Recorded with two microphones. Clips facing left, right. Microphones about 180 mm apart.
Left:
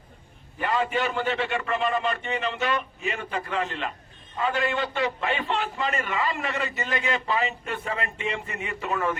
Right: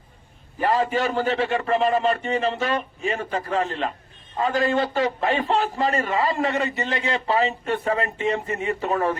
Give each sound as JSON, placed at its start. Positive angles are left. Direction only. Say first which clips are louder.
{"t": 0.6, "sound": "a man's voice", "louder": "right 4 dB", "side_deg": -35}
{"t": 6.7, "sound": "speech", "louder": "right 5 dB", "side_deg": -20}
{"t": 6.9, "sound": "a man's voice", "louder": "right 3 dB", "side_deg": -35}